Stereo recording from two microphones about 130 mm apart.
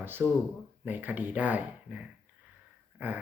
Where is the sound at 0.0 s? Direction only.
15° right (ahead or behind).